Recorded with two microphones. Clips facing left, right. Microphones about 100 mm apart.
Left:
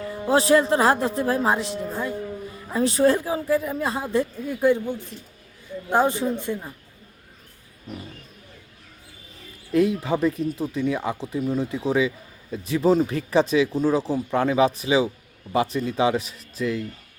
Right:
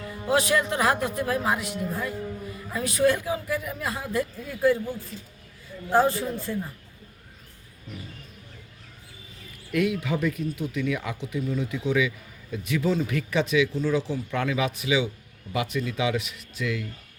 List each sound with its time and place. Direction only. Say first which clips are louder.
0.3 s speech: left 5 dB; 30° left (ahead or behind)
9.7 s speech: left 4 dB; 30° left (ahead or behind)